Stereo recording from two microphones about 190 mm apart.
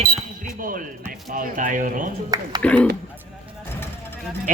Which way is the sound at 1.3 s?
45° right (ahead or behind).